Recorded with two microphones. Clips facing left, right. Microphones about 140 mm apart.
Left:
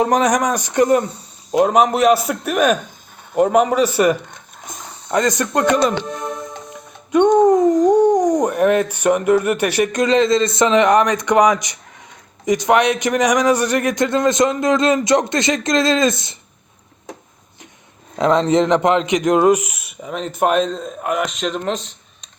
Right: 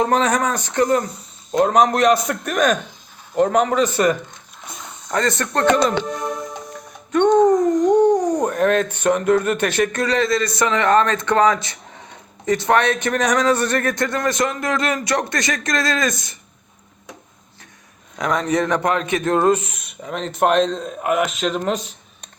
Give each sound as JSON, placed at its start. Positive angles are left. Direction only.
{"t": 0.0, "sound": "speech", "side_deg": 15}
{"t": 1.5, "sound": "speech", "side_deg": 10}
{"t": 4.3, "sound": "squish", "side_deg": 50}
{"t": 5.1, "sound": "speech", "side_deg": 15}
{"t": 7.1, "sound": "a sound", "side_deg": 10}
{"t": 8.4, "sound": "a man's voice", "side_deg": 10}
{"t": 18.2, "sound": "speech", "side_deg": 25}